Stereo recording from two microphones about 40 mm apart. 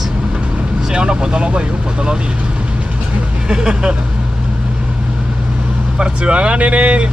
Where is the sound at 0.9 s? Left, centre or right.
Right.